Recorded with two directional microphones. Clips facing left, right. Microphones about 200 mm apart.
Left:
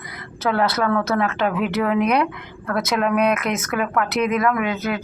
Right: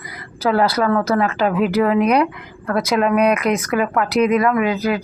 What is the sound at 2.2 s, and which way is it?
Speech, 5° right (ahead or behind).